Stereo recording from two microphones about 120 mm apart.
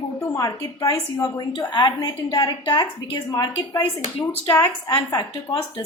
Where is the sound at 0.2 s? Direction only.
30° left (ahead or behind).